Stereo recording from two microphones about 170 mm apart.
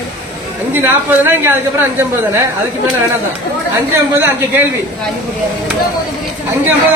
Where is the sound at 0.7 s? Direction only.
10° right (ahead or behind).